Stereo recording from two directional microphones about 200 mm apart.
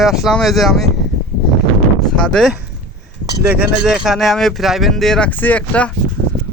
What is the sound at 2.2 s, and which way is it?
Speech, centre (ahead or behind).